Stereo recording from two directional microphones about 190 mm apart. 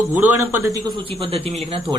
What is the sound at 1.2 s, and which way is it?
Speech, 30° right (ahead or behind).